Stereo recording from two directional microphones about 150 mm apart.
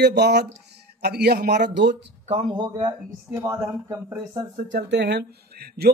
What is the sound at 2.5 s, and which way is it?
Speech, 30° right (ahead or behind).